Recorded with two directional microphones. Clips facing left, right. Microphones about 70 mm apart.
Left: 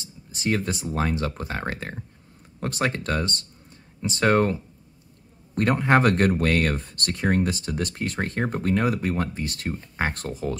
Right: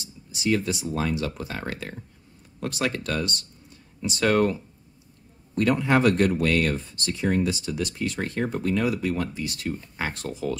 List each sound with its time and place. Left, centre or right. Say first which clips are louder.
0.0 s speech: right 1 dB; left